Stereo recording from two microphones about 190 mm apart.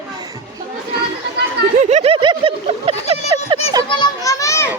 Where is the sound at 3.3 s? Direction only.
20° right (ahead or behind).